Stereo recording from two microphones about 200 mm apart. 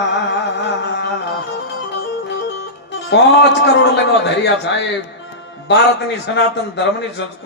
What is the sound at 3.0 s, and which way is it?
A man's voice, 60° left (ahead or behind).